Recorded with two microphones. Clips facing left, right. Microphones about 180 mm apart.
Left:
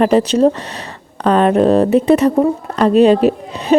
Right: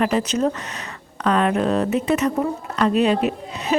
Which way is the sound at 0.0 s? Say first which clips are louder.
Left 8 dB; 35° left (ahead or behind).